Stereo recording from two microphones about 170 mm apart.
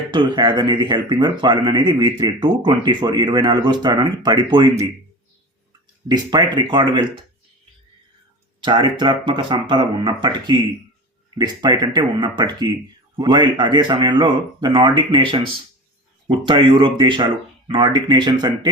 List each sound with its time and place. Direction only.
0.1 s speech: 25° right (ahead or behind)
6.1 s speech: 25° right (ahead or behind)
8.6 s speech: 30° right (ahead or behind)